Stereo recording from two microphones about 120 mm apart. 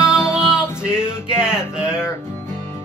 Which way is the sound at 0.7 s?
5° right (ahead or behind).